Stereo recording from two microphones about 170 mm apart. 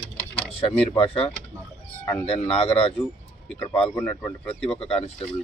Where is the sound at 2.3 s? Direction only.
35° left (ahead or behind).